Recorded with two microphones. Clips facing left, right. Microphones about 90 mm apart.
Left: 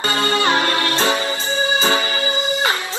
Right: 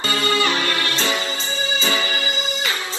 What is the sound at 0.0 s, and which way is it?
Music, 30° left (ahead or behind).